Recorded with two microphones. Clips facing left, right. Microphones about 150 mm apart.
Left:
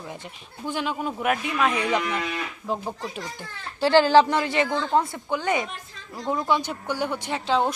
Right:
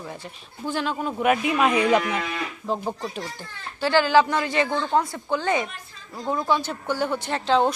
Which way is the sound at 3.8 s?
30° left (ahead or behind).